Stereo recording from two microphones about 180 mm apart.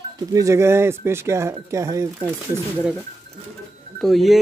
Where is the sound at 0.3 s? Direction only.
15° right (ahead or behind).